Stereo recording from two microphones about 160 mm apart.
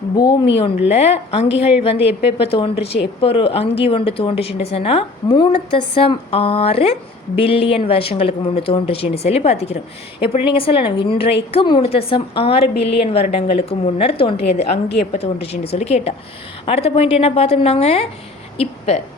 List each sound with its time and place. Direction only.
0.2 s speech: 25° left (ahead or behind)
0.5 s a woman's voice: 40° left (ahead or behind)
18.5 s a sound: 40° left (ahead or behind)